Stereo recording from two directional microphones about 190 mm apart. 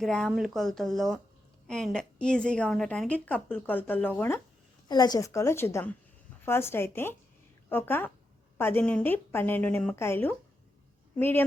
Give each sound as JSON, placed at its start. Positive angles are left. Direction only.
{"t": 0.0, "sound": "a woman's voice", "side_deg": 0}
{"t": 4.9, "sound": "a woman's voice", "side_deg": 20}